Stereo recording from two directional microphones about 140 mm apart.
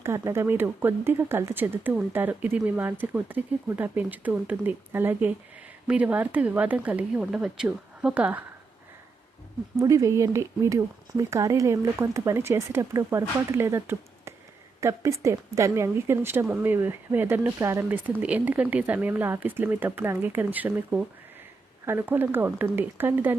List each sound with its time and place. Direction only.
0.0 s speech: 20° right (ahead or behind)
9.7 s speech: 20° right (ahead or behind)